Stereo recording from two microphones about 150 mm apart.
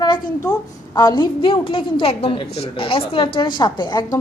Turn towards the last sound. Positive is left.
turn(degrees=30)  # may be behind; listen again after turning